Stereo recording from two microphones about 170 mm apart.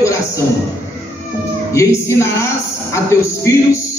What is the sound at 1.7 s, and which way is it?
A woman's voice, 15° left (ahead or behind).